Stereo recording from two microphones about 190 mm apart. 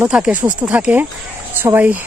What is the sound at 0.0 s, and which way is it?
Speech, 5° right (ahead or behind).